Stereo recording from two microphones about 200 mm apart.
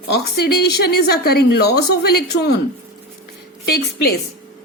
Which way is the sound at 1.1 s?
50° left (ahead or behind).